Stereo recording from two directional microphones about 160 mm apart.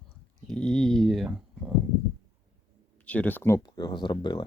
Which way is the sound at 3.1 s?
10° left (ahead or behind).